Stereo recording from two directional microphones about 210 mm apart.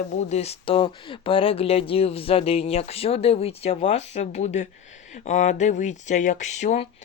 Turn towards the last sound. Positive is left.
turn(degrees=35)  # may be behind; listen again after turning